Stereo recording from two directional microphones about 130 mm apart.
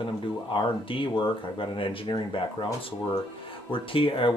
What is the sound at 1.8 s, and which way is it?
Speech, 40° left (ahead or behind).